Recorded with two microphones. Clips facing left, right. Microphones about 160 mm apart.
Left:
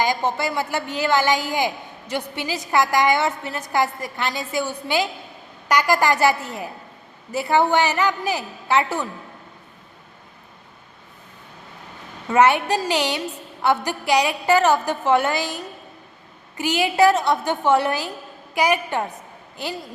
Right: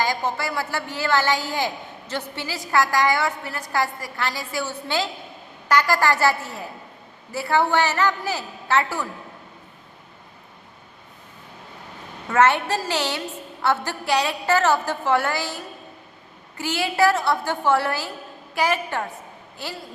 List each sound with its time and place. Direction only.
0.0 s a woman's voice: 20° left (ahead or behind)
12.3 s a woman's voice: 15° left (ahead or behind)